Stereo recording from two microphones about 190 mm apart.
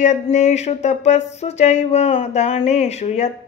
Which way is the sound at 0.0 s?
35° left (ahead or behind).